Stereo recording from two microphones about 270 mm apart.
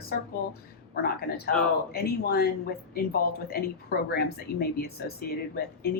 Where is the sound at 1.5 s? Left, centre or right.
Centre.